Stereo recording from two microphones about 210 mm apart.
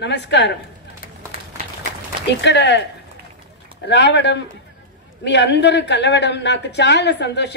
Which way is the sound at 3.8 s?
55° left (ahead or behind).